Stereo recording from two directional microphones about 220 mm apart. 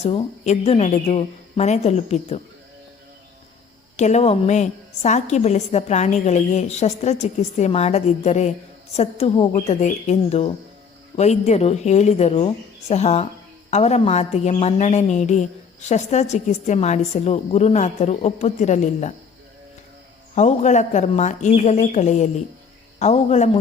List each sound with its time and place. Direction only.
0.0 s speech: 25° left (ahead or behind)
3.9 s a woman's voice: 30° left (ahead or behind)
20.3 s a woman's voice: 30° left (ahead or behind)